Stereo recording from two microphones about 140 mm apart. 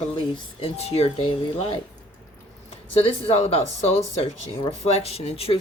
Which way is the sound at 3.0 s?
45° left (ahead or behind).